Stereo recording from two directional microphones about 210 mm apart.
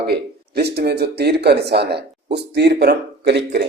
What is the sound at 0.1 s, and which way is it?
Speech, 50° right (ahead or behind).